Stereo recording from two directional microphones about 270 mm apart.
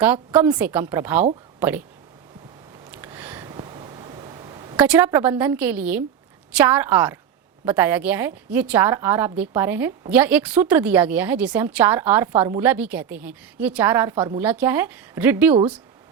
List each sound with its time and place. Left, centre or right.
0.0 s a woman's voice: centre
2.9 s a sound: centre
4.8 s a woman's voice: centre